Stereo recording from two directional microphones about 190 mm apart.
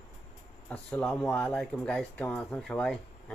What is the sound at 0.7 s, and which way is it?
Speech, 5° left (ahead or behind).